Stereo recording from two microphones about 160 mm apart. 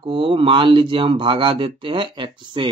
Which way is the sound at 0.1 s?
30° right (ahead or behind).